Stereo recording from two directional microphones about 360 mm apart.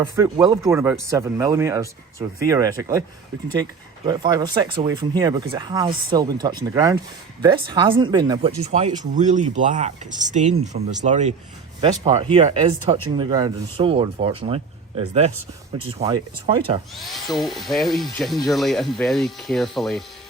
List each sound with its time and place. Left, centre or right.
0.0 s speech: centre
16.9 s speech: centre